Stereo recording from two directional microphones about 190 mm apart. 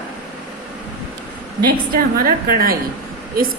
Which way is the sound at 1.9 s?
50° right (ahead or behind).